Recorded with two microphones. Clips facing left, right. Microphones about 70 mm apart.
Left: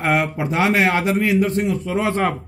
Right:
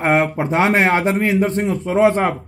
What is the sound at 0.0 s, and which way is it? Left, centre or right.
Speech, right.